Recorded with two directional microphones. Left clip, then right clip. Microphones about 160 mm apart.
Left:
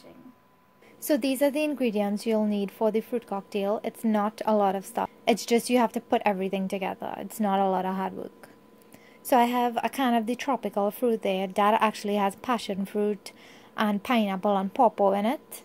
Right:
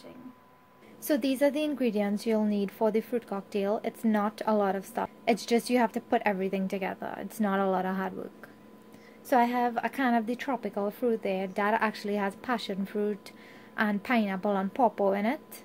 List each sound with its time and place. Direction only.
1.0 s a woman's voice: 30° left (ahead or behind)
9.3 s a woman's voice: 45° left (ahead or behind)